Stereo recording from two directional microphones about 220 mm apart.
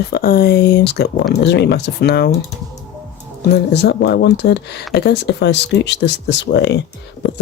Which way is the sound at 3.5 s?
50° left (ahead or behind).